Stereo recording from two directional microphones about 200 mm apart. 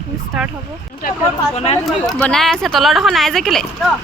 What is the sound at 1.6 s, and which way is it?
Speech, 30° left (ahead or behind).